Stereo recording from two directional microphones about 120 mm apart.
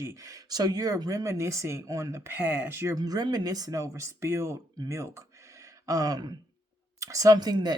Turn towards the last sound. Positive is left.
turn(degrees=-35)  # may be behind; listen again after turning